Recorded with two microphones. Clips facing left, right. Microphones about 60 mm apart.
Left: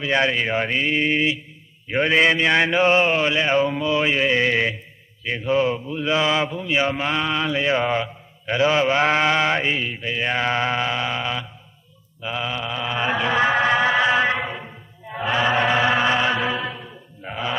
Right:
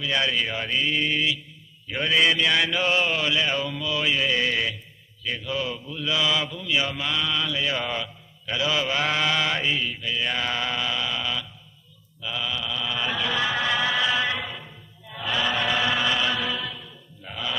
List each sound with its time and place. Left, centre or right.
0.0 s speech: left
12.2 s chant: left